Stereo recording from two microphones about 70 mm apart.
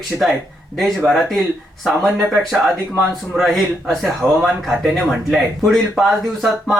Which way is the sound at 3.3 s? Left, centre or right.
Centre.